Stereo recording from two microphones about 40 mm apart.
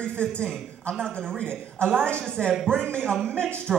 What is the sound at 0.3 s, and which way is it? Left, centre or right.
Speech, left.